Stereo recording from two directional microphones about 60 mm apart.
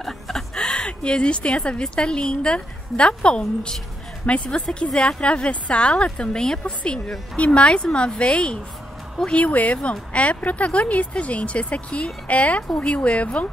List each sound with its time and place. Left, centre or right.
0.0 s a woman's voice: centre